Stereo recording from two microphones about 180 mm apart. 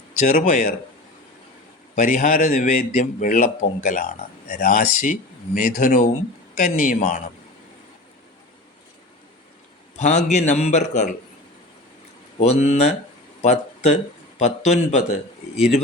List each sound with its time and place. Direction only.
0.2 s a man's voice: 45° left (ahead or behind)
2.0 s a man's voice: 45° left (ahead or behind)
10.0 s a man's voice: 40° left (ahead or behind)
12.4 s a man's voice: 35° left (ahead or behind)